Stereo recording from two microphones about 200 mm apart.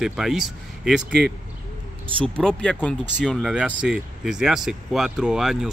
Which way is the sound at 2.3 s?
5° left (ahead or behind).